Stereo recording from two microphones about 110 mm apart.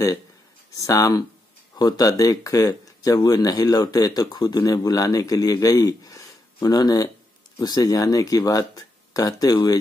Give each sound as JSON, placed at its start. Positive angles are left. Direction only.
{"t": 0.7, "sound": "speech", "side_deg": 35}